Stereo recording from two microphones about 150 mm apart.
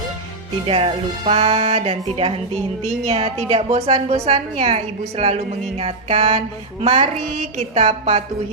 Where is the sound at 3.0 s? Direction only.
40° right (ahead or behind).